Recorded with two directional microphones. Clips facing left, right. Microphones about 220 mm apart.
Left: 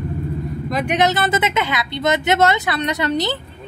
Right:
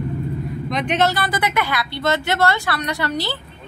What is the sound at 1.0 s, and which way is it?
Speech, 20° left (ahead or behind).